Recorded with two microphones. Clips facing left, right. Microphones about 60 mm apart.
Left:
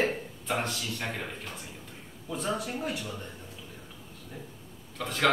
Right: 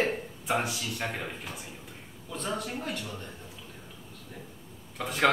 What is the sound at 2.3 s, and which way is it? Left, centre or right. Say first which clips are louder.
Speech: left 2 dB; centre.